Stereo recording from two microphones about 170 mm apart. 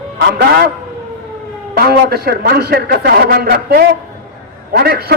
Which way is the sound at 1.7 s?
70° right (ahead or behind).